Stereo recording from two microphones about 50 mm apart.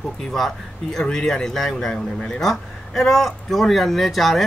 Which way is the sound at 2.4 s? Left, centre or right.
Centre.